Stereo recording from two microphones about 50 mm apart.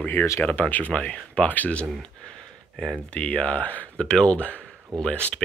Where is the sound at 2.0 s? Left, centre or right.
Centre.